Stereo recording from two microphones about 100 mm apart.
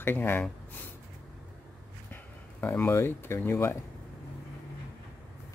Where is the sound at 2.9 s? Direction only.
25° left (ahead or behind).